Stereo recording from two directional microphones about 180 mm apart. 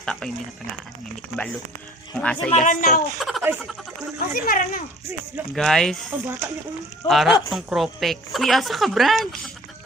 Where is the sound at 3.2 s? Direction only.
Centre (ahead or behind).